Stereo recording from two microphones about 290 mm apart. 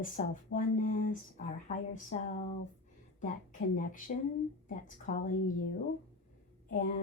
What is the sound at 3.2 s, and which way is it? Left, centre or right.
Speech, left.